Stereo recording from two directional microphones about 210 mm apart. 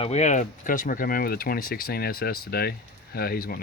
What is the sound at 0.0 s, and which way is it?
Speech, 30° left (ahead or behind).